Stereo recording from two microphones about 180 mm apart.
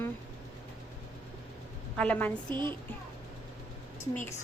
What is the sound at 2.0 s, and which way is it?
Speech, 10° left (ahead or behind).